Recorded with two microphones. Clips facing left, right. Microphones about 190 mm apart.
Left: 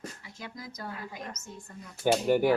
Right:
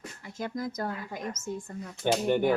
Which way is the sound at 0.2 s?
50° right (ahead or behind).